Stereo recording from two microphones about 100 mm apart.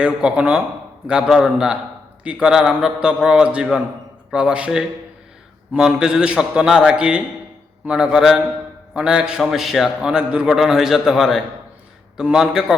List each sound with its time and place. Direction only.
0.0 s a man's voice: 10° right (ahead or behind)